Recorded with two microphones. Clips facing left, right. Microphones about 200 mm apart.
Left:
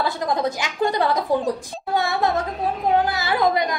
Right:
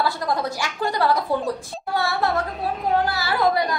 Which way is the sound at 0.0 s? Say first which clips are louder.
Left 1 dB; 20° left (ahead or behind).